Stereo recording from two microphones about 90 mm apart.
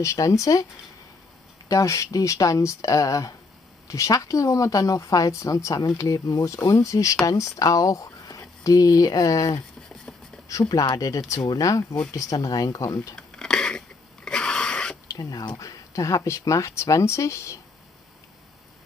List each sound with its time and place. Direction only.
0.0 s speech: 35° left (ahead or behind)
1.7 s speech: 35° left (ahead or behind)
10.5 s speech: 45° left (ahead or behind)
13.1 s a sound: 10° left (ahead or behind)
15.0 s speech: 45° left (ahead or behind)